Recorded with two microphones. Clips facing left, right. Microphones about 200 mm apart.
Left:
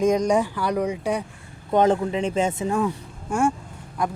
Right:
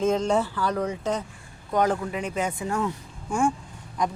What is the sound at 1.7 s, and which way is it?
Speech, 25° left (ahead or behind).